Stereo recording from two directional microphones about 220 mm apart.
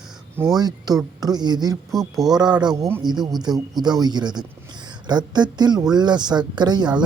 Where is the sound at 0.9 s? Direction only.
15° right (ahead or behind).